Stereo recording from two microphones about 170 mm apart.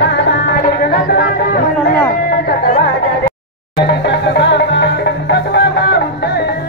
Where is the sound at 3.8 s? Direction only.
85° left.